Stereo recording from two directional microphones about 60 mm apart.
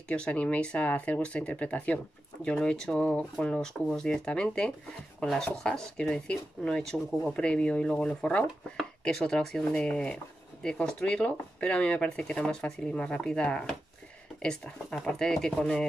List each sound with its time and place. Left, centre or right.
0.1 s speech: left
2.5 s speech: centre